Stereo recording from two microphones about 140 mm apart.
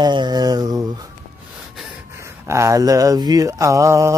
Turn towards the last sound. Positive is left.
turn(degrees=-20)  # may be behind; listen again after turning